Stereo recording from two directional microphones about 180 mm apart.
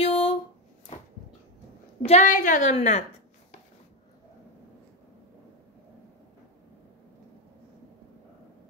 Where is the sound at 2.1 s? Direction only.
45° left (ahead or behind).